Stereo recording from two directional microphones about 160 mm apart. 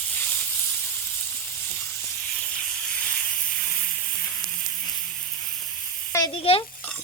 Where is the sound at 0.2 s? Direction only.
10° left (ahead or behind).